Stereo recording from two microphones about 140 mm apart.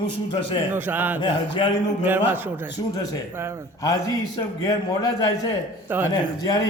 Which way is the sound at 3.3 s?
20° right (ahead or behind).